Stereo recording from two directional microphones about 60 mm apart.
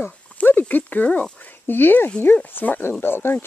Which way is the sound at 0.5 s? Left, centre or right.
Left.